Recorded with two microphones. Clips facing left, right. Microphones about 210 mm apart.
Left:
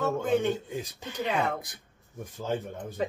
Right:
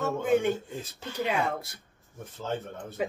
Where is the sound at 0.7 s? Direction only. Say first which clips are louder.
Left 2 dB; 15° left (ahead or behind).